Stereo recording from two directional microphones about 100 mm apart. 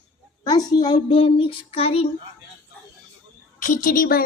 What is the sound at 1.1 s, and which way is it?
Child singing, 65° left (ahead or behind).